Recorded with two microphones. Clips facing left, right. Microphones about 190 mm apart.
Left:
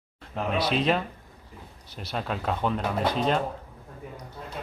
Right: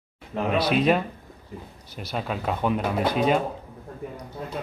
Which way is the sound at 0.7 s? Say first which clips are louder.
Right 4 dB; 5° right (ahead or behind).